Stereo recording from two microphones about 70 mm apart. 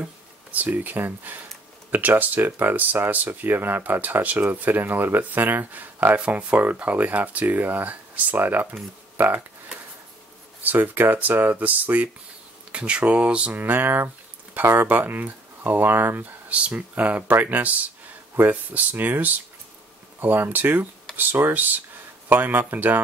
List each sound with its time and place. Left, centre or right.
0.5 s speech: right
10.6 s speech: right